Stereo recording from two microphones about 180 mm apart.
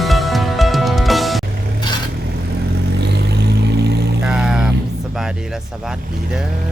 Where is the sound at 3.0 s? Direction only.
65° right (ahead or behind).